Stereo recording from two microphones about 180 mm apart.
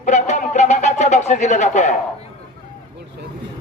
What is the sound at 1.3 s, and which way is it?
Speech, 40° left (ahead or behind).